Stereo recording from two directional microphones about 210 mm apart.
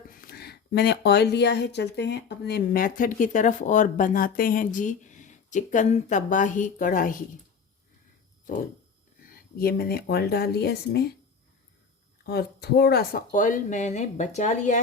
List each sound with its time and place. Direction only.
0.1 s speech: 45° left (ahead or behind)
9.2 s speech: 45° left (ahead or behind)
12.2 s speech: 50° left (ahead or behind)